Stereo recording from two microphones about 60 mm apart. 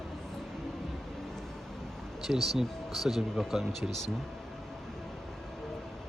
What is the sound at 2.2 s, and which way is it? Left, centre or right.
Speech, centre.